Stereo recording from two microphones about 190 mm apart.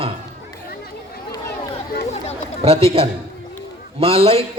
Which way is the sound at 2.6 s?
30° right (ahead or behind).